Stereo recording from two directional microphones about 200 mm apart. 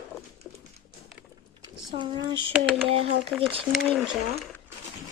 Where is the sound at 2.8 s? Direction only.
30° right (ahead or behind).